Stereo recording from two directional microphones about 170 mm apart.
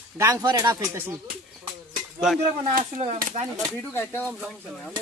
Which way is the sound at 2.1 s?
Centre (ahead or behind).